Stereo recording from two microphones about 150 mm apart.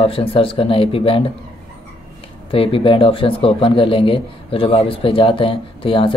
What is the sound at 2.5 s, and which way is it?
Speech, 35° left (ahead or behind).